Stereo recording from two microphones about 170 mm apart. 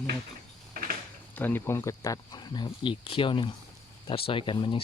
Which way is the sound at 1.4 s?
10° left (ahead or behind).